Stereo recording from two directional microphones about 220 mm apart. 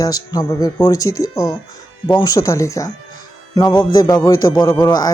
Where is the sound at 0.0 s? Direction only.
15° left (ahead or behind).